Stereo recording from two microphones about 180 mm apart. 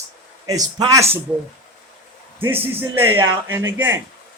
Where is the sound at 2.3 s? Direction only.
10° right (ahead or behind).